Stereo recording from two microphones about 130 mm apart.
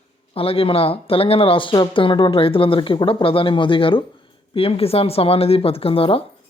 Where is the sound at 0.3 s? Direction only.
45° left (ahead or behind).